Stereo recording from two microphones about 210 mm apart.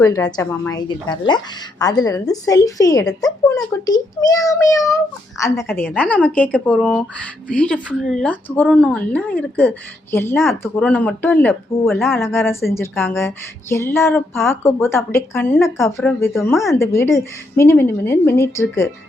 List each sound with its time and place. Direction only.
0.0 s a woman's voice: 15° left (ahead or behind)